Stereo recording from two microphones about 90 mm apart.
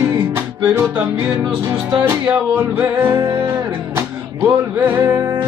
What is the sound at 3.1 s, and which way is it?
Music, 50° right (ahead or behind).